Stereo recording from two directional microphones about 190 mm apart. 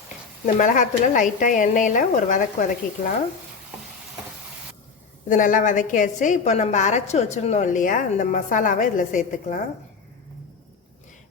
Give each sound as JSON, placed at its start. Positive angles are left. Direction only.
{"t": 0.4, "sound": "a woman's voice", "side_deg": 45}
{"t": 5.3, "sound": "a woman's voice", "side_deg": 45}